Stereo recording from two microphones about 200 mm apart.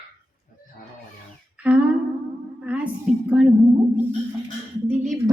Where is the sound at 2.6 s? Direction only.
5° right (ahead or behind).